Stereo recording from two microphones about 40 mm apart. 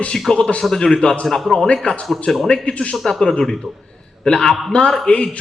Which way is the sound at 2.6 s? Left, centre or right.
Left.